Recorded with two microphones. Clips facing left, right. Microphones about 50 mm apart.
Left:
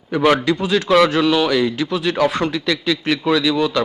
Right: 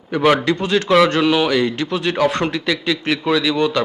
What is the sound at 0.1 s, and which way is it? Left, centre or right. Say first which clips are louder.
A man's voice: even; centre.